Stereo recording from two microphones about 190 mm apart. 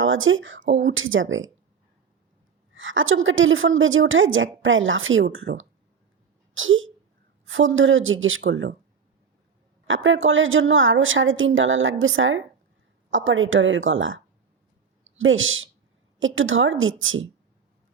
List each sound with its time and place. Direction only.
0.0 s a woman's voice: 90° right
2.7 s a woman's voice: 90° right
9.8 s a woman's voice: 90° right
15.2 s a woman's voice: 90° right